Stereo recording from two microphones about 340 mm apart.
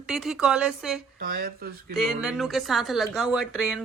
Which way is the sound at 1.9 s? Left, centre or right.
Centre.